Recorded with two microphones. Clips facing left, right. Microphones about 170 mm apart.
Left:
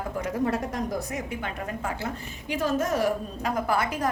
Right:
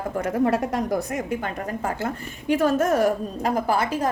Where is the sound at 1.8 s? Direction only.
50° right (ahead or behind).